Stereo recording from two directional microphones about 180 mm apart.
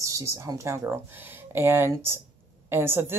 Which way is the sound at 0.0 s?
15° right (ahead or behind).